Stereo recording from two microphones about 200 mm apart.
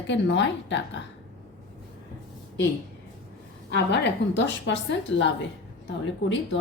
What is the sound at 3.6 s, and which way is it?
A woman's voice, 60° left (ahead or behind).